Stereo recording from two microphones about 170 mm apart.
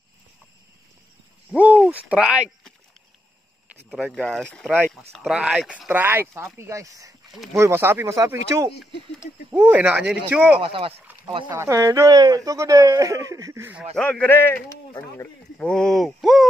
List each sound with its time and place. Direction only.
1.5 s speech: 5° right (ahead or behind)
3.9 s speech: centre (ahead or behind)
10.6 s speech: 30° right (ahead or behind)
11.4 s speech: 15° right (ahead or behind)
13.9 s a man's voice: 5° left (ahead or behind)